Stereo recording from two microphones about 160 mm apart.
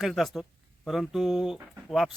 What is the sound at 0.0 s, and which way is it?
A man's voice, centre (ahead or behind).